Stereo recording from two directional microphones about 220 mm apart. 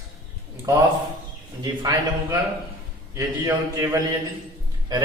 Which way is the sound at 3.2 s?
15° right (ahead or behind).